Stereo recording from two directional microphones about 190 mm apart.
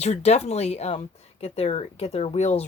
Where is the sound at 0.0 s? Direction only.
35° left (ahead or behind).